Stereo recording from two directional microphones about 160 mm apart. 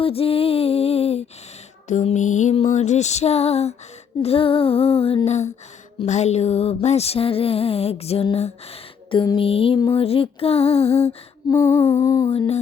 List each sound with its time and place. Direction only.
0.0 s music: 35° left (ahead or behind)
1.9 s a sound: 45° left (ahead or behind)
4.2 s music: 35° left (ahead or behind)
11.5 s humming: 15° left (ahead or behind)
12.2 s music: 35° left (ahead or behind)